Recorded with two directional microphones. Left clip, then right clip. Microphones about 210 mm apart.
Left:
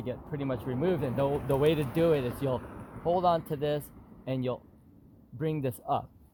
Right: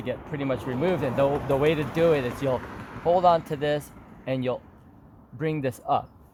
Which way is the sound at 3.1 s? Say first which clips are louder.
Right 6 dB; 30° left (ahead or behind).